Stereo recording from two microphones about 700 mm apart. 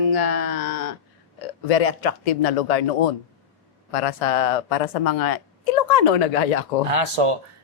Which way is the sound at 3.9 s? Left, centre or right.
Left.